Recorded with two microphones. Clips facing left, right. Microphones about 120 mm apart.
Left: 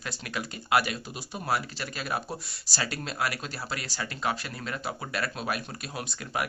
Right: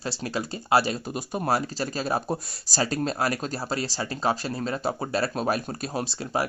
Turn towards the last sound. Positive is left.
turn(degrees=-30)  # may be behind; listen again after turning